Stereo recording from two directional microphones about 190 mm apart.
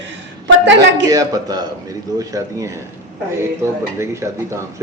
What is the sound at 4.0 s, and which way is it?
Speech, 15° right (ahead or behind).